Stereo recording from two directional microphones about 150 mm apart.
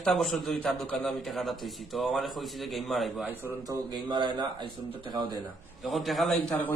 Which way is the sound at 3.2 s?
10° right (ahead or behind).